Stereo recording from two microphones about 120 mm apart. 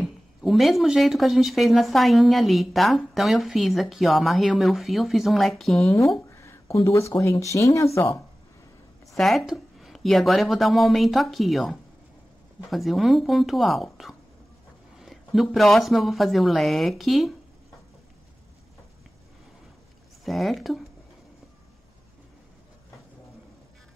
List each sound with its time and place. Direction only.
0.0 s speech: centre (ahead or behind)
5.9 s speech: 25° left (ahead or behind)
9.0 s a woman's voice: centre (ahead or behind)
20.2 s speech: centre (ahead or behind)